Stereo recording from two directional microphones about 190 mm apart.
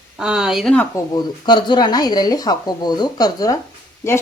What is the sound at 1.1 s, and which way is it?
Speech, 25° left (ahead or behind).